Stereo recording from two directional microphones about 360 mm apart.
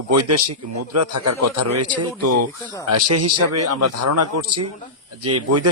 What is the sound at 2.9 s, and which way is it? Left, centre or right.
A man's voice, right.